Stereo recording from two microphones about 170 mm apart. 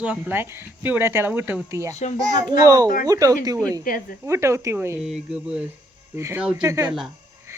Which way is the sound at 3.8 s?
55° left (ahead or behind).